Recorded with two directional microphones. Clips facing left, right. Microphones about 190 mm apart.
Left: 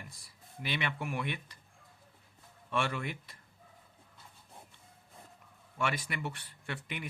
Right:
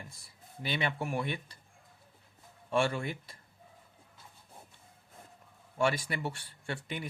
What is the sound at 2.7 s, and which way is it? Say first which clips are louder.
Speech: right 4 dB; 30° right (ahead or behind).